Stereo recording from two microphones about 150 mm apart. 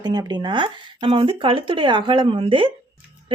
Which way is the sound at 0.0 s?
30° right (ahead or behind).